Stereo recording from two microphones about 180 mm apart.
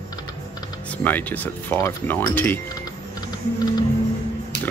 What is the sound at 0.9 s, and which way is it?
Speech, 10° left (ahead or behind).